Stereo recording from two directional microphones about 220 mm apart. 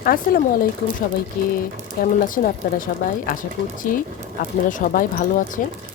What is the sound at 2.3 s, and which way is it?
Speech, 40° left (ahead or behind).